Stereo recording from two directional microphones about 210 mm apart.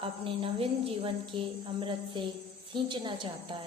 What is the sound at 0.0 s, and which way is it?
A woman's voice, 25° right (ahead or behind).